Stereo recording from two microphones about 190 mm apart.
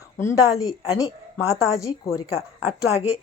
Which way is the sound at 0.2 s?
15° left (ahead or behind).